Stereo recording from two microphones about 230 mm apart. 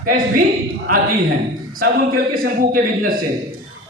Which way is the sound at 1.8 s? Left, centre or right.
Right.